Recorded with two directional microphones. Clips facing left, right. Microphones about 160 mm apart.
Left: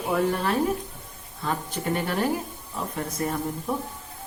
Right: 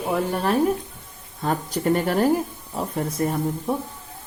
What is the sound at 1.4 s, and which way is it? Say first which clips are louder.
Speech: right 5 dB; 40° right (ahead or behind).